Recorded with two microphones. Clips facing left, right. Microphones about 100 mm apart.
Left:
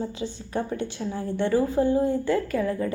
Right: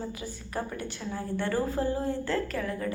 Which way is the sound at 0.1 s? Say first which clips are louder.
Left 6 dB; 25° left (ahead or behind).